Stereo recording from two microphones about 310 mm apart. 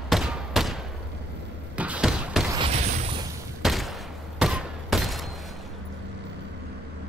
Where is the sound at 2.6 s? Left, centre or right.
Centre.